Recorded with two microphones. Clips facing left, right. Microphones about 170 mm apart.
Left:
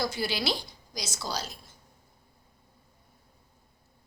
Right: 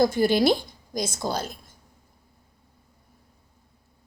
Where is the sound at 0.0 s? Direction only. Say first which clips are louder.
Right 11 dB; 50° right (ahead or behind).